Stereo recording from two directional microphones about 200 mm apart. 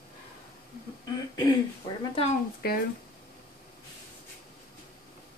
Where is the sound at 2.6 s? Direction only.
50° left (ahead or behind).